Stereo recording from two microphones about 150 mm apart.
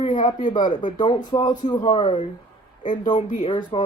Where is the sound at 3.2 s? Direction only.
60° left (ahead or behind).